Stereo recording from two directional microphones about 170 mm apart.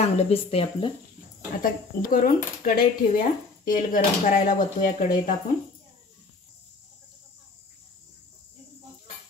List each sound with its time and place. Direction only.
0.0 s speech: 35° left (ahead or behind)
1.6 s speech: 55° left (ahead or behind)